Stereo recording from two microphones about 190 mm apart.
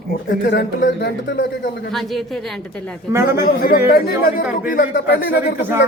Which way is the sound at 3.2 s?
50° left (ahead or behind).